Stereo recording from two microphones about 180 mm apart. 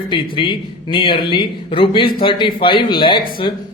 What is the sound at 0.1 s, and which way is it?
A man's voice, 25° left (ahead or behind).